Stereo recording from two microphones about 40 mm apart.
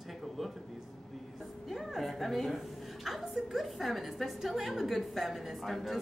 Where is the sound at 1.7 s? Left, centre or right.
Centre.